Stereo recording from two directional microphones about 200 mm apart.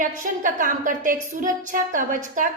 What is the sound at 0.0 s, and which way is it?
A woman's voice, 40° right (ahead or behind).